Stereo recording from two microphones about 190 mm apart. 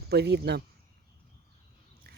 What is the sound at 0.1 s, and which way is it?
Speech, 60° right (ahead or behind).